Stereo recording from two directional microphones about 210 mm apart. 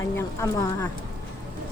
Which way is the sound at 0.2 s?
15° left (ahead or behind).